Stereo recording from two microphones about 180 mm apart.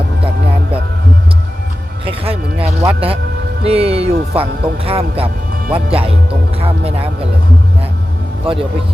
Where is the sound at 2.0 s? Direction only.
30° right (ahead or behind).